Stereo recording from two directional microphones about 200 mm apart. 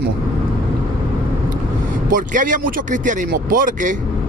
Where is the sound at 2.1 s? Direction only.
40° right (ahead or behind).